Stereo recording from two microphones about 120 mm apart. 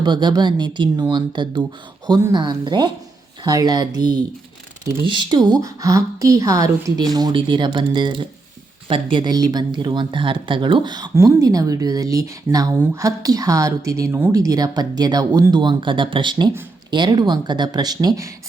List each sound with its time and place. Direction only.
0.0 s a woman's voice: 40° right (ahead or behind)
11.1 s speech: 25° right (ahead or behind)
14.3 s a woman's voice: 30° right (ahead or behind)